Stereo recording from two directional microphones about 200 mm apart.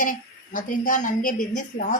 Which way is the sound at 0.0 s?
40° left (ahead or behind).